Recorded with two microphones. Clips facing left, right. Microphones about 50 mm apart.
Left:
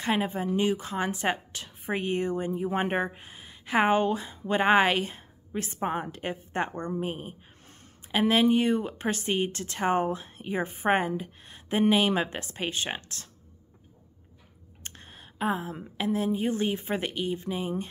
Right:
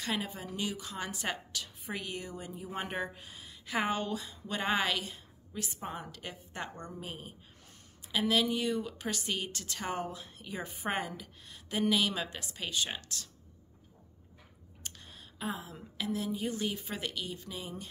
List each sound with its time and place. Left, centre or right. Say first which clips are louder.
0.0 s speech: left 9 dB; left
14.8 s speech: left 3 dB; left